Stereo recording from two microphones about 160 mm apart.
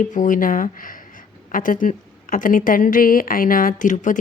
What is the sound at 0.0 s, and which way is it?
Speech, 55° left (ahead or behind).